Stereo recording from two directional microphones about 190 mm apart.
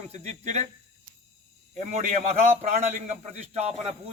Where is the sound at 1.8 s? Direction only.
35° right (ahead or behind).